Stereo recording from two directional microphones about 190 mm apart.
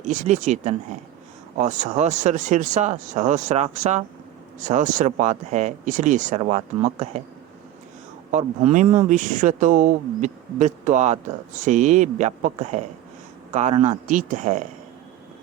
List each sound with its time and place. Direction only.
0.1 s speech: 40° right (ahead or behind)
8.3 s speech: 40° right (ahead or behind)